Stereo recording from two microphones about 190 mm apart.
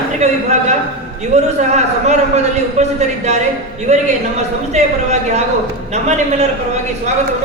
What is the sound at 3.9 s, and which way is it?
A man's voice, 35° right (ahead or behind).